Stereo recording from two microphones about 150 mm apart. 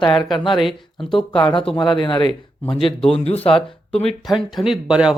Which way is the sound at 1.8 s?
30° left (ahead or behind).